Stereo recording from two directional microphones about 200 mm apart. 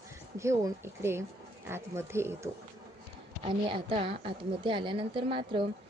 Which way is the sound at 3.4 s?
25° right (ahead or behind).